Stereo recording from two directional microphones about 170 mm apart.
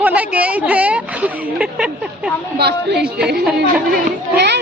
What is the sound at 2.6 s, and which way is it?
Speech, 75° right (ahead or behind).